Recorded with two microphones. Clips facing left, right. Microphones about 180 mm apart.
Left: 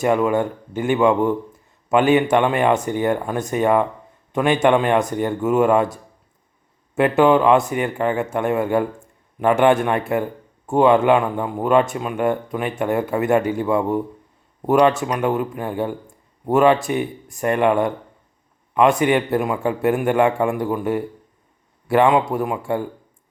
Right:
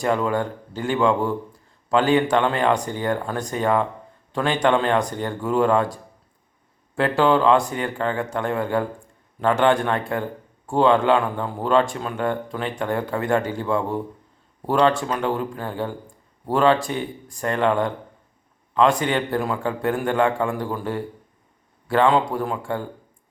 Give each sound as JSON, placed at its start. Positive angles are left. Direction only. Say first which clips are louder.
{"t": 0.0, "sound": "a man's voice", "louder": "left 4 dB", "side_deg": 20}
{"t": 22.0, "sound": "speech", "louder": "left 1 dB", "side_deg": 20}